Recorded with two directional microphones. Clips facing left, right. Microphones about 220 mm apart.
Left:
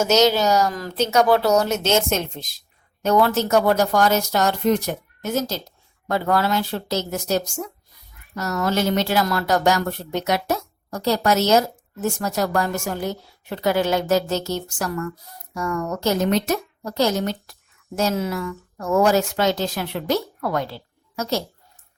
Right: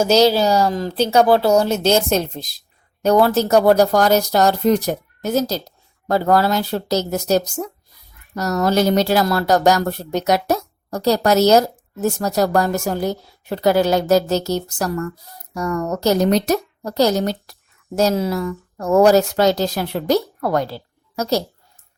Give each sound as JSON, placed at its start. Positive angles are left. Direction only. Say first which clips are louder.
{"t": 0.0, "sound": "a woman's voice", "louder": "right 3 dB", "side_deg": -30}